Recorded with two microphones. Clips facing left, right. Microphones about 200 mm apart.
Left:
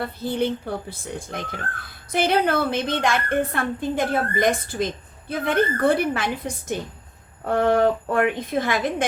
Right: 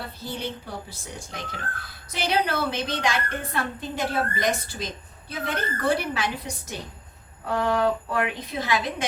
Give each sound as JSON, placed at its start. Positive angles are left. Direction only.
{"t": 0.0, "sound": "a woman's voice", "side_deg": 55}